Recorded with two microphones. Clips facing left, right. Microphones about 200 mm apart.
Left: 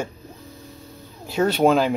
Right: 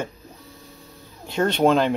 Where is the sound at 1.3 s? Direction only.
5° left (ahead or behind).